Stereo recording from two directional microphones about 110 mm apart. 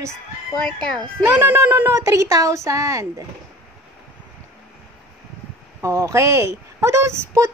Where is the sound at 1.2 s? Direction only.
25° right (ahead or behind).